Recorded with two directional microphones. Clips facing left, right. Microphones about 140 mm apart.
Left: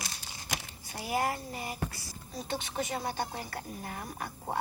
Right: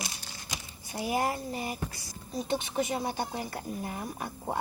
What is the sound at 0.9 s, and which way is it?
A woman's voice, 20° right (ahead or behind).